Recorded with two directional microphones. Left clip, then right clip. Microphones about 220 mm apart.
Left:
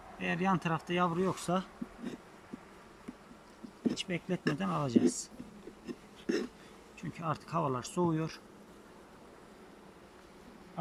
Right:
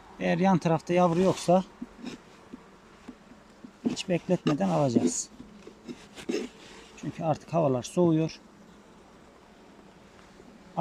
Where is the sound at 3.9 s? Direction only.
20° right (ahead or behind).